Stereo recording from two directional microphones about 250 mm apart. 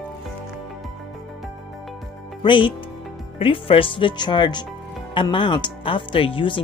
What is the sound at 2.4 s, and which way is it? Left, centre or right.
Speech, centre.